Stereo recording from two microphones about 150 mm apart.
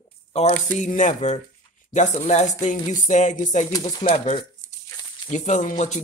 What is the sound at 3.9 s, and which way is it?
Speech, 30° left (ahead or behind).